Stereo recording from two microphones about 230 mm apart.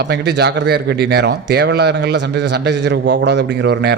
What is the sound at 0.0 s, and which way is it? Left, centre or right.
Speech, right.